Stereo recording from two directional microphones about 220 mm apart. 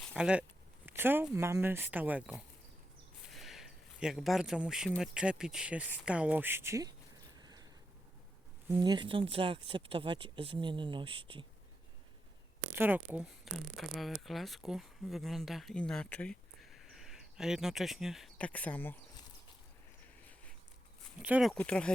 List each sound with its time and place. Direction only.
0.0 s speech: centre (ahead or behind)
7.3 s a sound: 15° right (ahead or behind)
8.7 s speech: 20° right (ahead or behind)
12.7 s speech: 10° right (ahead or behind); by 19.2 s 10° left (ahead or behind)
21.2 s speech: 5° right (ahead or behind)
21.5 s speech: 5° left (ahead or behind)